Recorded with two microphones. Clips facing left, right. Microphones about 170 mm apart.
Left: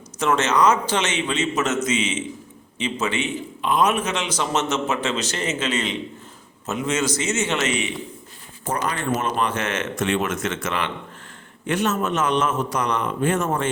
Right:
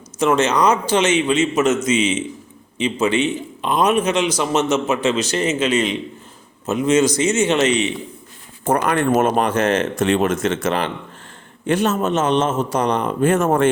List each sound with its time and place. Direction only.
0.3 s a man's voice: 15° right (ahead or behind)
8.6 s a man's voice: 55° right (ahead or behind)